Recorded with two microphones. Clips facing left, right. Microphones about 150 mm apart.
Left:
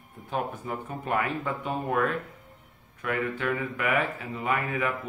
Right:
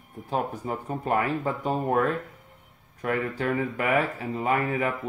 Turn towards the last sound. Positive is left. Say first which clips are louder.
# right 3 dB
turn(degrees=-35)  # may be behind; listen again after turning